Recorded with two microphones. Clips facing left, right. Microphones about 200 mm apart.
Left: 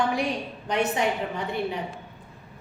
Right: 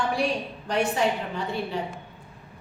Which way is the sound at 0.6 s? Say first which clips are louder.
Right 1 dB; 20° left (ahead or behind).